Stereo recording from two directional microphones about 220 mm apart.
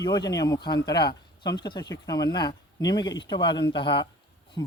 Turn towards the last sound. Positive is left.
turn(degrees=20)  # may be behind; listen again after turning